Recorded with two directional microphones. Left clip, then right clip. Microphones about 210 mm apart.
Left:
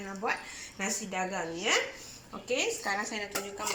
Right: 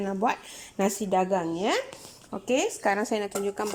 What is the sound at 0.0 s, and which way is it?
A woman's voice, 50° right (ahead or behind).